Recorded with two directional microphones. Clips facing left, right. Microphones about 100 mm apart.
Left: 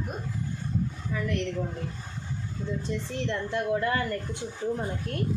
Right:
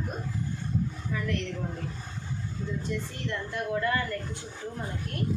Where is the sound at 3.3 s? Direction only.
25° left (ahead or behind).